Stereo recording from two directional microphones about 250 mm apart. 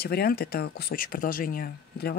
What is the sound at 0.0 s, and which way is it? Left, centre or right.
Speech, left.